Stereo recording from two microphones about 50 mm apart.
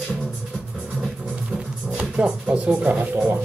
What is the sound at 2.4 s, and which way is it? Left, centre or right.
Speech, right.